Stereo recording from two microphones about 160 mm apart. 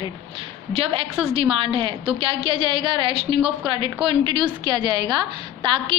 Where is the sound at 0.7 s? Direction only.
40° right (ahead or behind).